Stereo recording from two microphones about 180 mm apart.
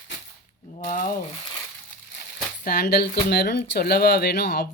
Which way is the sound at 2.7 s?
60° left (ahead or behind).